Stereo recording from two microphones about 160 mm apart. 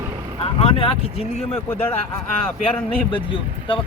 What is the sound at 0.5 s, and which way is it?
Speech, 35° left (ahead or behind).